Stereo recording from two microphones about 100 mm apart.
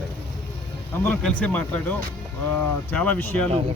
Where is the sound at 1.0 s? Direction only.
15° left (ahead or behind).